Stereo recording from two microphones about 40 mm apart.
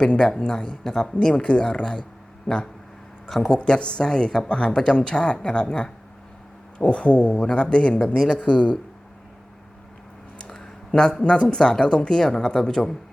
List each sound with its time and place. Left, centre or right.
0.2 s speech: left
2.5 s speech: left
3.2 s speech: centre
3.6 s speech: left
10.5 s a sound: centre
11.4 s speech: centre